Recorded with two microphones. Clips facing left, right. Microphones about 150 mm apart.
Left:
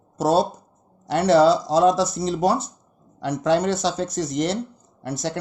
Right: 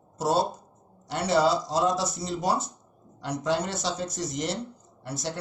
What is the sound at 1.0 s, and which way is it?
Speech, 70° left (ahead or behind).